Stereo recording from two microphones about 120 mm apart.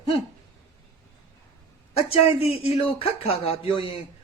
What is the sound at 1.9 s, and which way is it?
A man's voice, 55° left (ahead or behind).